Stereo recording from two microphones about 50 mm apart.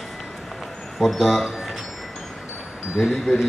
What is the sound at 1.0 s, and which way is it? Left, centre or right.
Speech, centre.